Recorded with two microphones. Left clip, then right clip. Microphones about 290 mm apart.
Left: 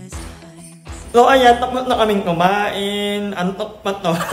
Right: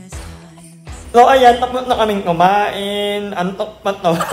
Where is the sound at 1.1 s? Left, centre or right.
Centre.